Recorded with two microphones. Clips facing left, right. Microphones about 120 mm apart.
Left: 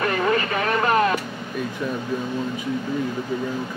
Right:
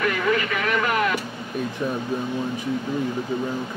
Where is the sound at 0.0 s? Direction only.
35° left (ahead or behind).